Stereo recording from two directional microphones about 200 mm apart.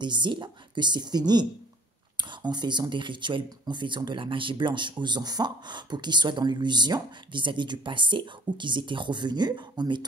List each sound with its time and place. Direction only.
0.0 s speech: 25° right (ahead or behind)